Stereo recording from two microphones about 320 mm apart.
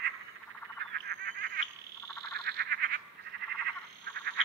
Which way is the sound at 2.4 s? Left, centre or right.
Right.